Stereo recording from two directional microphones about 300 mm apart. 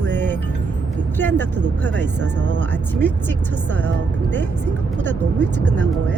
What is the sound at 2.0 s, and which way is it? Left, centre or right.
Speech, right.